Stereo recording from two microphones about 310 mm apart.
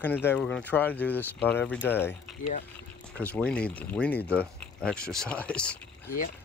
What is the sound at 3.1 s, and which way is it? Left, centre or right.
Speech, centre.